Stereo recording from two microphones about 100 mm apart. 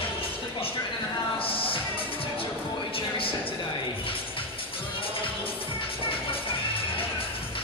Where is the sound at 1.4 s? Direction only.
65° left (ahead or behind).